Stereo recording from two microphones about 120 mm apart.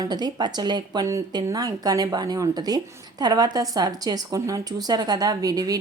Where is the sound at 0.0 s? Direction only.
35° right (ahead or behind).